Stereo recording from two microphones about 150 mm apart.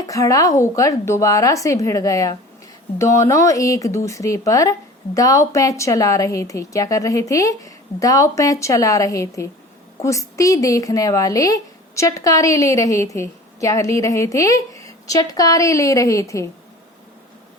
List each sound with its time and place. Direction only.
0.0 s a woman's voice: 25° left (ahead or behind)